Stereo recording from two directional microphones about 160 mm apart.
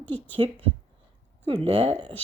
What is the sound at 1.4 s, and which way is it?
Speech, 35° right (ahead or behind).